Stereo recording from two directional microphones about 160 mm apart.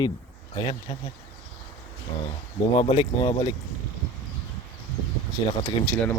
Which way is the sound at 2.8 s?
35° left (ahead or behind).